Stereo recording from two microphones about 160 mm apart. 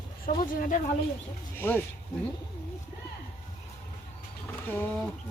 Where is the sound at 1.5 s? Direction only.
15° left (ahead or behind).